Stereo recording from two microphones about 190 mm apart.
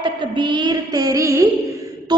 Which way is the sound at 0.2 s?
25° right (ahead or behind).